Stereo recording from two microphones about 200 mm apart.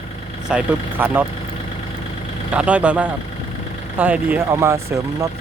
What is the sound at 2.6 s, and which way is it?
Speech, 5° right (ahead or behind).